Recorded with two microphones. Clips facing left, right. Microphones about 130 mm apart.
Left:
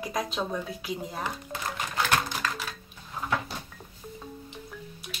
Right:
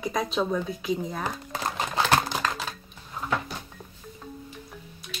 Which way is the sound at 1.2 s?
40° right (ahead or behind).